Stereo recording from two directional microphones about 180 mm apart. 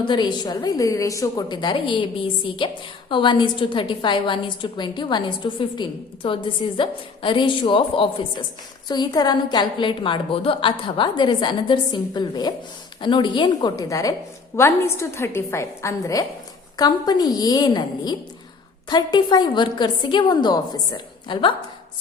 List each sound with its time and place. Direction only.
0.0 s a woman's voice: 25° left (ahead or behind)